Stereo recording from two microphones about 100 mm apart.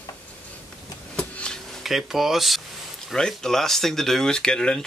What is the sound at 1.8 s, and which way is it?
Speech, 5° right (ahead or behind).